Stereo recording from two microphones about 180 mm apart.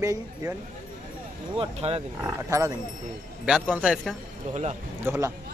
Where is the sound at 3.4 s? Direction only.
5° right (ahead or behind).